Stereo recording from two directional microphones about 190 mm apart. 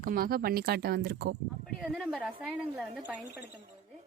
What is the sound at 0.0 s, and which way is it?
Speech, 50° right (ahead or behind).